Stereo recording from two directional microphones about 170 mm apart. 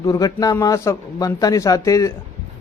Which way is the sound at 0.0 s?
20° left (ahead or behind).